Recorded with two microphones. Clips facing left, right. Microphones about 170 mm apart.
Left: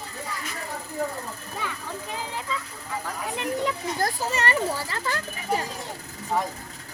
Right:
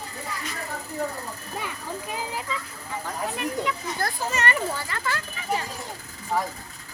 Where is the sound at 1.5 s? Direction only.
10° right (ahead or behind).